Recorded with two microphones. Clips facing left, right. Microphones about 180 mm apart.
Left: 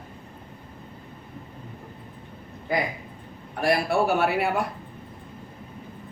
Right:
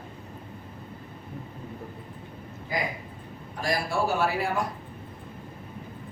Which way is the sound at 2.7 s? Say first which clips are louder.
Left 4 dB; 60° left (ahead or behind).